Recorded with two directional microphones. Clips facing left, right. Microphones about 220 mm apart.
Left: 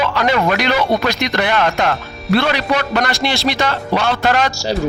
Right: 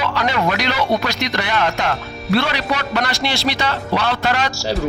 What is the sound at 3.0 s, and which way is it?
Speech, 50° left (ahead or behind).